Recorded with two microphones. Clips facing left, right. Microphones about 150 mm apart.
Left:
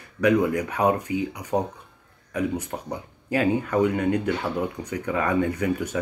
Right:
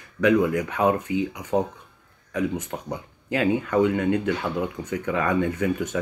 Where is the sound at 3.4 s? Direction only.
35° left (ahead or behind).